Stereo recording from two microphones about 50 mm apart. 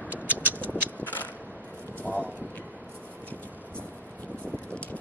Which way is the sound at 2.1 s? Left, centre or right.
Right.